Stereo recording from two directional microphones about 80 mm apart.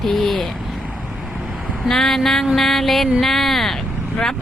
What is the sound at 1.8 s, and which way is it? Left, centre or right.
Speech, centre.